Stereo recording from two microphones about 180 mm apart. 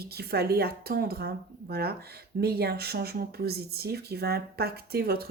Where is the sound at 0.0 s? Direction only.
60° right (ahead or behind).